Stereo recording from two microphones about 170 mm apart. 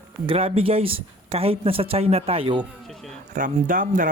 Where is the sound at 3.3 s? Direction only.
50° right (ahead or behind).